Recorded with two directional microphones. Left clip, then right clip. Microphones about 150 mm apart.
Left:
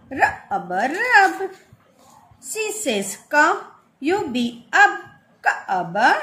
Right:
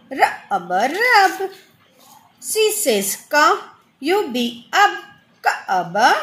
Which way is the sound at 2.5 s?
50° right (ahead or behind).